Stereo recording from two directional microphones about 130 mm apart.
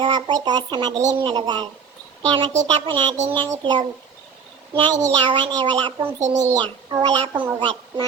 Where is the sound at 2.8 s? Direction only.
35° right (ahead or behind).